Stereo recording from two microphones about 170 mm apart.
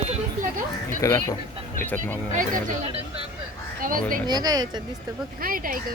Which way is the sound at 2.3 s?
50° right (ahead or behind).